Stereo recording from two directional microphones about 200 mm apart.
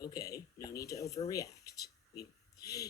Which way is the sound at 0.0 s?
15° left (ahead or behind).